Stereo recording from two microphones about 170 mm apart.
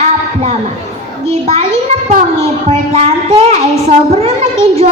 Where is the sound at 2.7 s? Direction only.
40° right (ahead or behind).